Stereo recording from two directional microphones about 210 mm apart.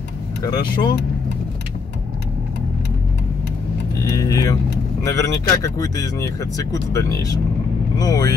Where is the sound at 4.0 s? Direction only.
15° left (ahead or behind).